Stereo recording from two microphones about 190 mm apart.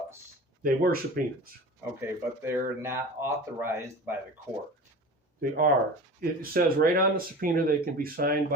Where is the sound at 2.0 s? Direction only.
10° right (ahead or behind).